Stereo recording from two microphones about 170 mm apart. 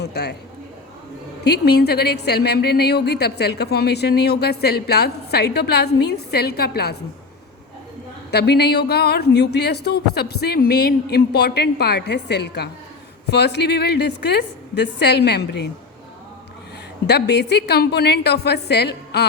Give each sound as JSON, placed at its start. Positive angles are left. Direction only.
{"t": 0.0, "sound": "a sound", "side_deg": 75}
{"t": 1.5, "sound": "a woman's voice", "side_deg": 75}
{"t": 8.3, "sound": "a woman's voice", "side_deg": 75}
{"t": 17.1, "sound": "a woman's voice", "side_deg": 80}